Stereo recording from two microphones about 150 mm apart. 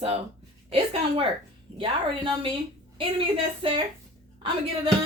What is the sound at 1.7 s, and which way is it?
A woman's voice, 35° right (ahead or behind).